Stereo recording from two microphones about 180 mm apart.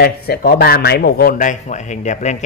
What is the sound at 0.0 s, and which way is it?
Speech, 55° left (ahead or behind).